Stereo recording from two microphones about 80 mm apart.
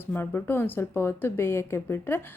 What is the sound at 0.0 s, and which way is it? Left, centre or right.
Speech, left.